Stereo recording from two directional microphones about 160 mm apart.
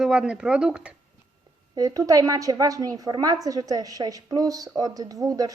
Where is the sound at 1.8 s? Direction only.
20° right (ahead or behind).